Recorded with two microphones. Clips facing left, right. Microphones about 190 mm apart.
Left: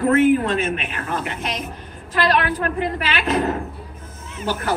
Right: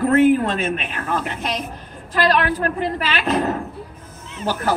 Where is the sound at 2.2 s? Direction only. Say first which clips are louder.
Right 1 dB; 40° right (ahead or behind).